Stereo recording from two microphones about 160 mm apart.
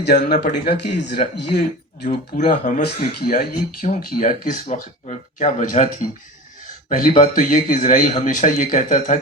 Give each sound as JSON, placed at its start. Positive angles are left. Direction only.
{"t": 0.0, "sound": "speech", "side_deg": 90}
{"t": 2.0, "sound": "speech", "side_deg": 60}
{"t": 2.8, "sound": "speech", "side_deg": 70}
{"t": 7.1, "sound": "speech", "side_deg": 55}